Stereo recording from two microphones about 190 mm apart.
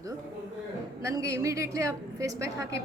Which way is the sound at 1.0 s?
15° right (ahead or behind).